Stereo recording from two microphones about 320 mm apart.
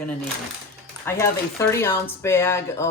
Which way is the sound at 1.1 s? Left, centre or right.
Centre.